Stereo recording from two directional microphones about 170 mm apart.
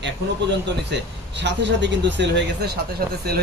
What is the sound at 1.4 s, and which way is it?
Speech, 90° right.